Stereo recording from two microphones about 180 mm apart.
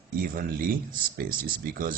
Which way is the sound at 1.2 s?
55° right (ahead or behind).